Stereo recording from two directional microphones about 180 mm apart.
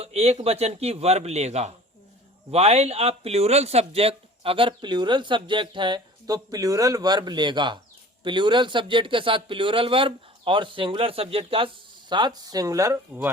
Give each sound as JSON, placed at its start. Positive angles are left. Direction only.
{"t": 0.0, "sound": "speech", "side_deg": -35}